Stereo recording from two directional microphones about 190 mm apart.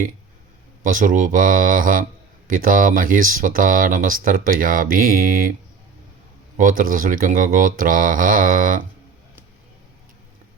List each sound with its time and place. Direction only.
0.9 s speech: 45° right (ahead or behind)
6.6 s speech: 45° right (ahead or behind)